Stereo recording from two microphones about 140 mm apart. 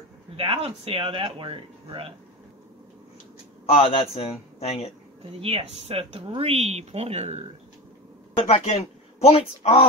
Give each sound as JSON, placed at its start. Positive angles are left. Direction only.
{"t": 0.4, "sound": "speech", "side_deg": -45}
{"t": 3.6, "sound": "speech", "side_deg": 45}
{"t": 5.4, "sound": "speech", "side_deg": -40}
{"t": 8.4, "sound": "speech", "side_deg": 45}